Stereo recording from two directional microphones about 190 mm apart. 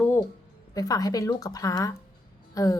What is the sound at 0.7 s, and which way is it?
A woman's voice, 20° left (ahead or behind).